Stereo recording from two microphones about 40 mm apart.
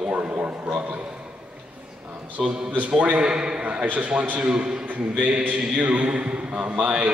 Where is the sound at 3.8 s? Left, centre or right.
Right.